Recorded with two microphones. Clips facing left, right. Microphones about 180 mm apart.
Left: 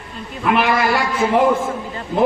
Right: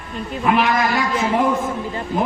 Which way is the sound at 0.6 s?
70° left (ahead or behind).